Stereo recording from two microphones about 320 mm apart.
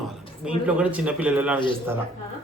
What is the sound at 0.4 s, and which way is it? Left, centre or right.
A man's voice, centre.